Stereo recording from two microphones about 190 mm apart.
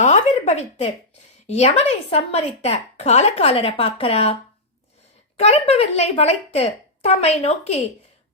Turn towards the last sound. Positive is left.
turn(degrees=35)  # may be behind; listen again after turning